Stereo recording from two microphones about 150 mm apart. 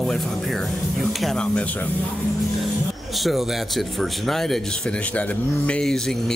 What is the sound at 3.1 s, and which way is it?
Speech, centre (ahead or behind).